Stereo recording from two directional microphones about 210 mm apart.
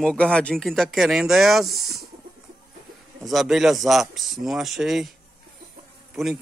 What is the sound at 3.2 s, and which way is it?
A man's voice, centre (ahead or behind).